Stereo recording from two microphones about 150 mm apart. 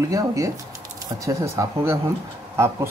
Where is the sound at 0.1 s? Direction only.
20° right (ahead or behind).